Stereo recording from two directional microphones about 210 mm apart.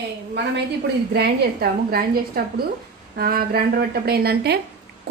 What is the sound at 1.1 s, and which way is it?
A woman's voice, 50° right (ahead or behind).